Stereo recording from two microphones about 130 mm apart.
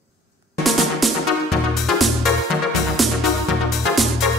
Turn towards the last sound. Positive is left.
turn(degrees=0)  # may be behind; listen again after turning